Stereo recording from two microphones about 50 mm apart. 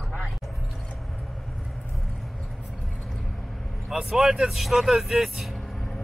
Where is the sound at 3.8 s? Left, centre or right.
Centre.